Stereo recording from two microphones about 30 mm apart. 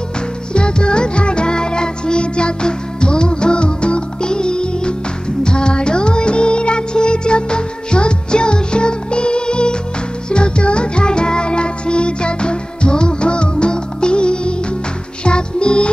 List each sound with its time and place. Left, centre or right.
0.5 s music: left
5.4 s music of bollywood: left
10.3 s music: left